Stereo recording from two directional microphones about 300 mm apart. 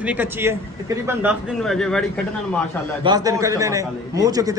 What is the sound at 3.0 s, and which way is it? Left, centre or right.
Speech, centre.